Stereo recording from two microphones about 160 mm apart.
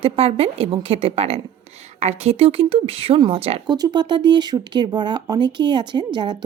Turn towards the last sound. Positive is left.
turn(degrees=-25)  # may be behind; listen again after turning